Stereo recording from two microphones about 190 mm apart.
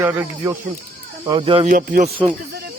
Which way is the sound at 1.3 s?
30° right (ahead or behind).